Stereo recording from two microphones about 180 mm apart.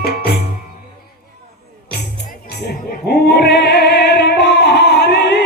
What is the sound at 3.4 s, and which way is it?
Music, 65° left (ahead or behind).